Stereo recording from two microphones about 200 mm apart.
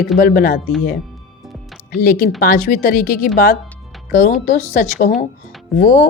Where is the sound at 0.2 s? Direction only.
45° left (ahead or behind).